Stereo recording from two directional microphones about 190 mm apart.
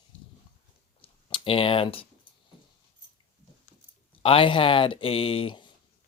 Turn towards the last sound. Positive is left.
turn(degrees=30)  # may be behind; listen again after turning